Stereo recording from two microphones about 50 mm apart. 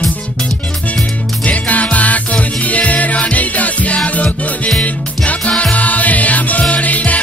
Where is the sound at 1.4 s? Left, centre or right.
Left.